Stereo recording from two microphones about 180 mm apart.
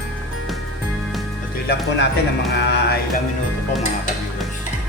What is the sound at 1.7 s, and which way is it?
Speech, 70° left (ahead or behind).